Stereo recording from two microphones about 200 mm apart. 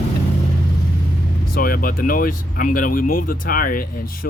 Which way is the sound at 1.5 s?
45° left (ahead or behind).